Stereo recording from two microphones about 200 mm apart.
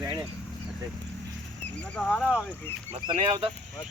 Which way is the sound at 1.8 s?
5° left (ahead or behind).